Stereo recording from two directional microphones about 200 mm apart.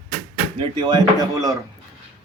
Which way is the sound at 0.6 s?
20° right (ahead or behind).